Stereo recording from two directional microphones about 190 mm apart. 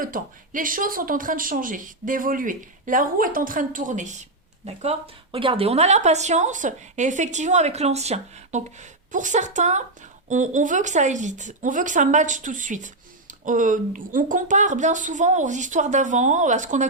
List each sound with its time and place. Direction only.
0.0 s speech: 45° right (ahead or behind)